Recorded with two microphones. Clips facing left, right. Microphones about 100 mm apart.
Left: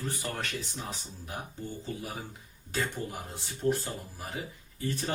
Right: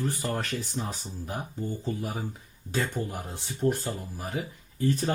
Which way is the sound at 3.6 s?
30° right (ahead or behind).